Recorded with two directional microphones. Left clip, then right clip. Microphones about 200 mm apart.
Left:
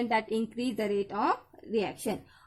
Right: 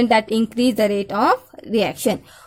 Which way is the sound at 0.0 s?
45° right (ahead or behind).